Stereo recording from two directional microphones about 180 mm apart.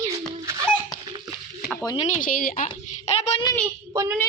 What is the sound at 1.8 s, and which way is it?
Speech, 30° left (ahead or behind).